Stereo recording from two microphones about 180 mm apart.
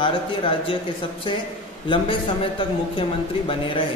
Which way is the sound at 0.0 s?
30° left (ahead or behind).